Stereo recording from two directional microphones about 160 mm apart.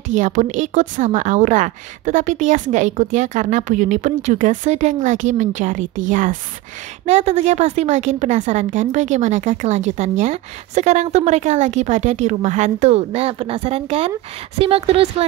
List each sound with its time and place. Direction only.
0.1 s a woman's voice: 50° right (ahead or behind)
7.1 s a woman's voice: 45° right (ahead or behind)